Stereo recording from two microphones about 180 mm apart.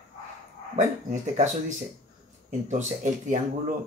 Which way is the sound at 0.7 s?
40° right (ahead or behind).